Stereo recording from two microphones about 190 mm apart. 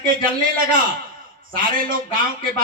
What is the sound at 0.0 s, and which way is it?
Speech, 50° right (ahead or behind).